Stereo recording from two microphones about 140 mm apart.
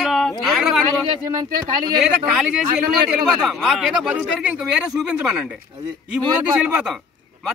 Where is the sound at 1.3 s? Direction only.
30° right (ahead or behind).